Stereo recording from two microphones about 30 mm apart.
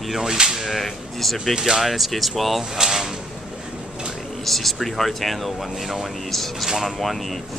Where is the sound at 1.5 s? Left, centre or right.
Centre.